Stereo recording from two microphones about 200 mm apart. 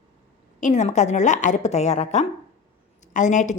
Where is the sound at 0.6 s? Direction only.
35° left (ahead or behind).